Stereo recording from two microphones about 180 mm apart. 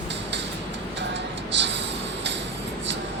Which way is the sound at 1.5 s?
80° right.